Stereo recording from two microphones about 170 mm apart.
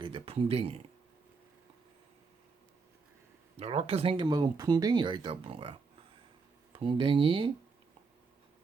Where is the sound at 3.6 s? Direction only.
35° right (ahead or behind).